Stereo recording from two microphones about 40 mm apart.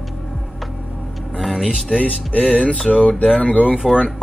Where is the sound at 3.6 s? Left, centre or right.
Centre.